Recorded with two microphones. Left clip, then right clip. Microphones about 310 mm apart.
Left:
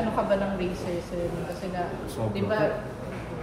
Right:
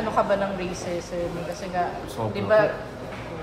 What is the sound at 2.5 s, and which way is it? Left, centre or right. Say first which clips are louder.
Speech: right 8 dB; right.